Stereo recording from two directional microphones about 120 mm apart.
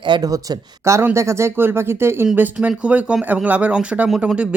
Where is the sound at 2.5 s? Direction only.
10° right (ahead or behind).